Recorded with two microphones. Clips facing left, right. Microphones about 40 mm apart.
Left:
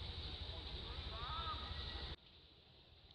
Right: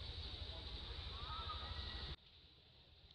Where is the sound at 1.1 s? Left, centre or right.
Left.